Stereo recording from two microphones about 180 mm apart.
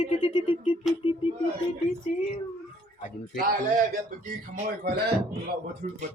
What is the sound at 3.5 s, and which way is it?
Speech, 50° right (ahead or behind).